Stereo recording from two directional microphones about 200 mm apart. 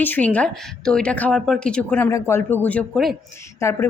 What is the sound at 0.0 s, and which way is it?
A woman's voice, 10° left (ahead or behind).